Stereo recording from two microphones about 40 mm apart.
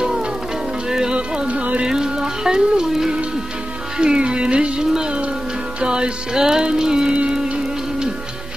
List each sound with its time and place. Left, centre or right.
0.0 s music: centre
1.5 s music: right
1.8 s music: centre